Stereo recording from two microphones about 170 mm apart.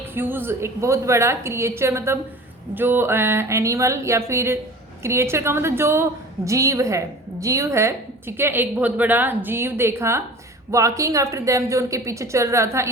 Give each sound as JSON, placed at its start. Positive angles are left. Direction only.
{"t": 0.1, "sound": "a woman's voice", "side_deg": -10}